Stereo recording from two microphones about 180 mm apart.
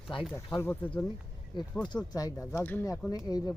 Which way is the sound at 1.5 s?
25° left (ahead or behind).